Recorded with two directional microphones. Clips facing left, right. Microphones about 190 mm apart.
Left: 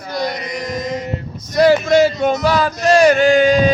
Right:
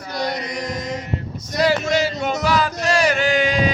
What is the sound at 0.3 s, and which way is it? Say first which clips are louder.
Chant: left 2 dB; 70° right (ahead or behind).